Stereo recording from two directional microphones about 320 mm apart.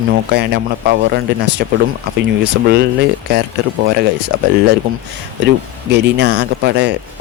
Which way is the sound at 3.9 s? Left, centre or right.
Right.